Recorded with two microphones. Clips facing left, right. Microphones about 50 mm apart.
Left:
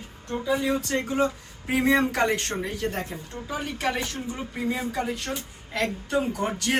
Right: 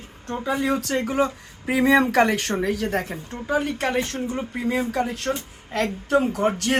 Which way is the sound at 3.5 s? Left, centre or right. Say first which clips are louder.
Right 5 dB; right.